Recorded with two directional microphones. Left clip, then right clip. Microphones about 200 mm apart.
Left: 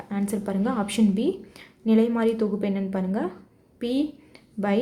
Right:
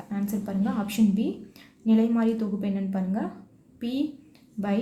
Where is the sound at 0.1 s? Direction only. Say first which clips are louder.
Left 4 dB; 25° left (ahead or behind).